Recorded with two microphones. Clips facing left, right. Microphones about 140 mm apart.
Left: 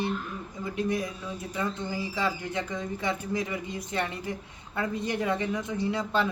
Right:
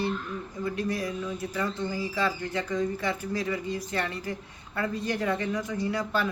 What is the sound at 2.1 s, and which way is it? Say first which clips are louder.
Speech: right 1 dB; 15° left (ahead or behind).